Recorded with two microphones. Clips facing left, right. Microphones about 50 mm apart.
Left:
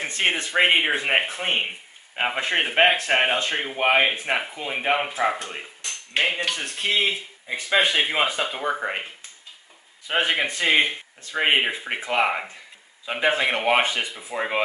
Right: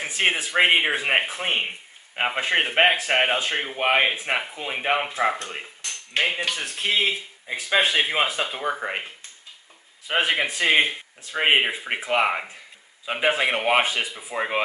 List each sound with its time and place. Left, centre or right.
0.0 s speech: centre